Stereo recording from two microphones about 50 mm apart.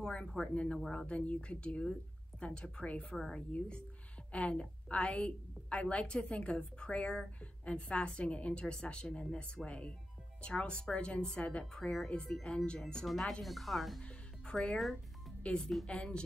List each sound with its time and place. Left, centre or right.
0.0 s a woman's voice: centre
13.0 s speech: centre
14.0 s music: centre
15.4 s a woman's voice: centre